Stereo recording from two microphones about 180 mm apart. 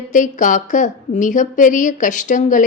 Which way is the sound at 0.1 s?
45° left (ahead or behind).